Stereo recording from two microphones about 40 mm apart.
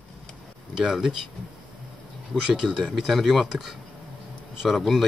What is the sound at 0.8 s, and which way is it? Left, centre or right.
Speech, centre.